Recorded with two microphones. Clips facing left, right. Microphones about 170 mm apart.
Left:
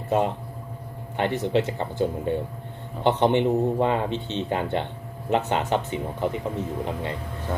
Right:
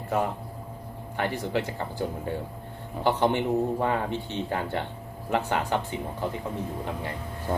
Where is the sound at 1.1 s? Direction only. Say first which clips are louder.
Left 5 dB; 20° left (ahead or behind).